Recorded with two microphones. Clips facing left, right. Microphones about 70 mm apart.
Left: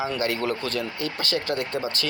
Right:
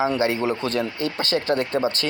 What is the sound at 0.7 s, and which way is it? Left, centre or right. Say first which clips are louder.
Speech: right 4 dB; right.